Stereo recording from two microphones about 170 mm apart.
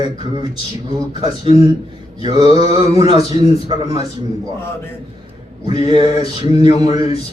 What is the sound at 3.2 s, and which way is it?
Speech, 35° left (ahead or behind).